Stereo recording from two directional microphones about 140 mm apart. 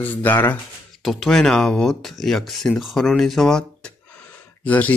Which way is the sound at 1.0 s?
Centre (ahead or behind).